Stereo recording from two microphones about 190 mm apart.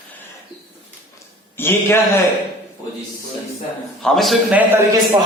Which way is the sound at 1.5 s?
10° left (ahead or behind).